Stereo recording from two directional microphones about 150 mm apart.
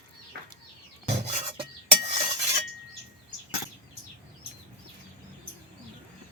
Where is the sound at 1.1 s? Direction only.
50° right (ahead or behind).